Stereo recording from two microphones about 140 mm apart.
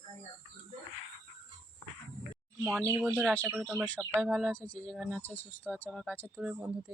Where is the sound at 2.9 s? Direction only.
20° right (ahead or behind).